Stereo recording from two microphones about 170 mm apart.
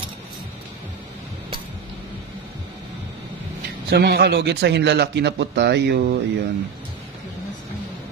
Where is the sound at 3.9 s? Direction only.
70° right (ahead or behind).